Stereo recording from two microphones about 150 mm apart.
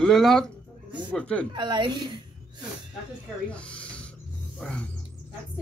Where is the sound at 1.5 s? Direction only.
30° right (ahead or behind).